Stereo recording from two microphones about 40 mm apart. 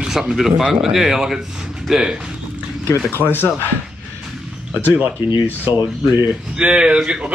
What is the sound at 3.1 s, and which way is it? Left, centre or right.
Speech, left.